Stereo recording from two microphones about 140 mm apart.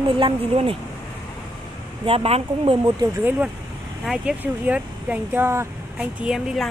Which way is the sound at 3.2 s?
15° right (ahead or behind).